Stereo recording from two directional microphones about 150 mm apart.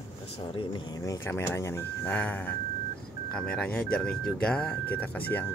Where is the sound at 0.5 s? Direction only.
25° left (ahead or behind).